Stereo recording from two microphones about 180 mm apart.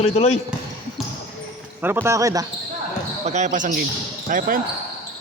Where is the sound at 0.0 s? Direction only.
35° left (ahead or behind).